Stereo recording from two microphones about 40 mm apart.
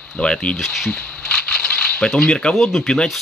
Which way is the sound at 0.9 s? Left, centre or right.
Left.